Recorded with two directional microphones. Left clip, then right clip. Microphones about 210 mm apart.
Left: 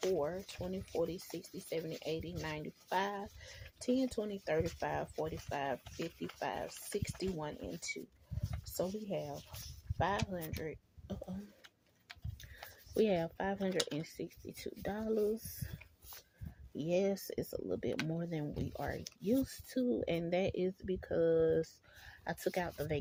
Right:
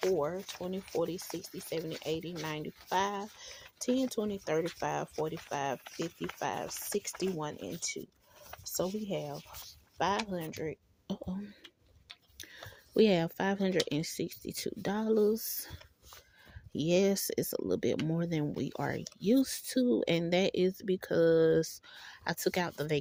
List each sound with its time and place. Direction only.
0.2 s speech: 30° right (ahead or behind)
12.9 s speech: 45° right (ahead or behind)
16.7 s speech: 45° right (ahead or behind)